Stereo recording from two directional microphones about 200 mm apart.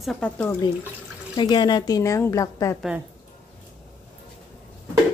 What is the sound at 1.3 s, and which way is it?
A woman's voice, 20° left (ahead or behind).